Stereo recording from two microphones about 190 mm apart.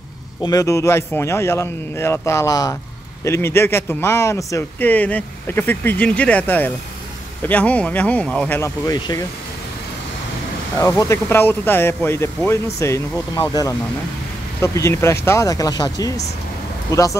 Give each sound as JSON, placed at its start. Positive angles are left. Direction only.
{"t": 0.4, "sound": "speech", "side_deg": 20}
{"t": 10.8, "sound": "speech", "side_deg": 15}